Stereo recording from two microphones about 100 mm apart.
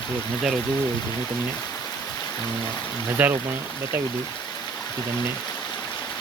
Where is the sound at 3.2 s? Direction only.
15° right (ahead or behind).